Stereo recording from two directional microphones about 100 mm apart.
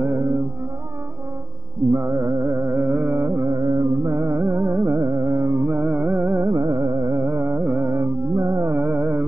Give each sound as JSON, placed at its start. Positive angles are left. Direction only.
{"t": 0.0, "sound": "music", "side_deg": -20}
{"t": 2.0, "sound": "music", "side_deg": -25}
{"t": 6.5, "sound": "music", "side_deg": -35}